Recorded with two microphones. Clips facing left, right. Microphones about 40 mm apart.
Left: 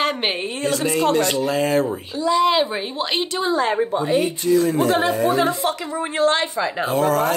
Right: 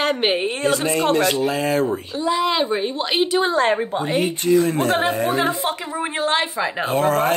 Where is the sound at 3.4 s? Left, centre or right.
Right.